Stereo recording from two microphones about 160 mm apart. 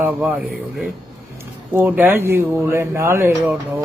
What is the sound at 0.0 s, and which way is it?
Speech, 10° right (ahead or behind).